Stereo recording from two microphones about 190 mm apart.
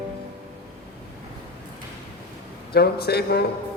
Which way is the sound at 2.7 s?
55° left (ahead or behind).